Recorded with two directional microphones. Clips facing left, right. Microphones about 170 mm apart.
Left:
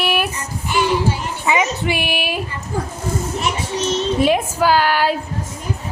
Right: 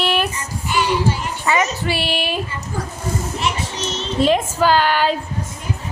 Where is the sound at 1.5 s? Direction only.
15° left (ahead or behind).